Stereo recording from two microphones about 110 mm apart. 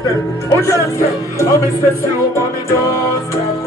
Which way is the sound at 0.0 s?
30° left (ahead or behind).